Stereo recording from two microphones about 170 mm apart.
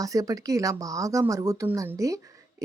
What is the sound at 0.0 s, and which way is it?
Speech, 20° right (ahead or behind).